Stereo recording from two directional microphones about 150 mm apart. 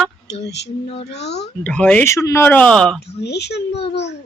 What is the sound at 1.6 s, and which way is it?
Speech, 10° left (ahead or behind).